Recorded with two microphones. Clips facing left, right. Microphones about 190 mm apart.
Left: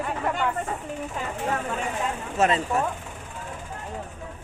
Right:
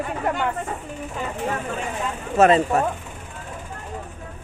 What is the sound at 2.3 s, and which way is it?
Speech, 75° right (ahead or behind).